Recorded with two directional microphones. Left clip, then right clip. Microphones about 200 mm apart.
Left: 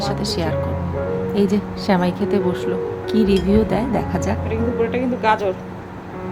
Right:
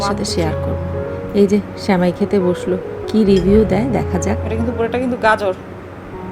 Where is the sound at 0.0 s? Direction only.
10° right (ahead or behind).